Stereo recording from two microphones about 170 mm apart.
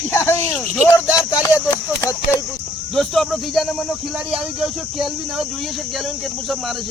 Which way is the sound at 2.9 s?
Centre (ahead or behind).